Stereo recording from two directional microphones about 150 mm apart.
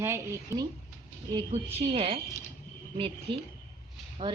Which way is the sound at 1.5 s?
45° right (ahead or behind).